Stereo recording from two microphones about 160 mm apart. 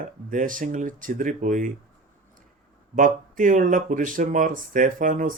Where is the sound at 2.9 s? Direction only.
55° right (ahead or behind).